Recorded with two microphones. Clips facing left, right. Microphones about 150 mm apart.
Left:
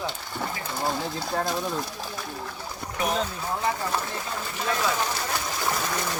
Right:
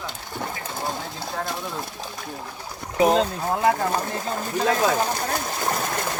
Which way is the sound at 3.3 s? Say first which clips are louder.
Right 6 dB; 50° right (ahead or behind).